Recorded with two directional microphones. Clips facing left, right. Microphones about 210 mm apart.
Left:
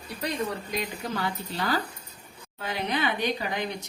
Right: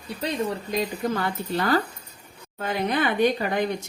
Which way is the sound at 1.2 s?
55° right (ahead or behind).